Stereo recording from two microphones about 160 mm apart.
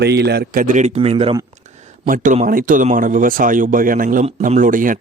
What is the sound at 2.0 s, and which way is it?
A man's voice, 55° right (ahead or behind).